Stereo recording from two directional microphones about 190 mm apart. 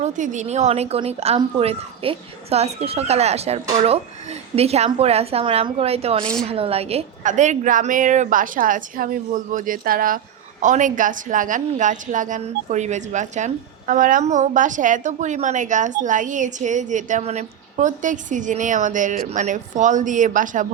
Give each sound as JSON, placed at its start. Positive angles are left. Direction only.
{"t": 0.0, "sound": "a woman's voice", "side_deg": -40}